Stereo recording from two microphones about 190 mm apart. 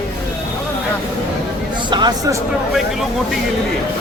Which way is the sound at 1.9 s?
20° right (ahead or behind).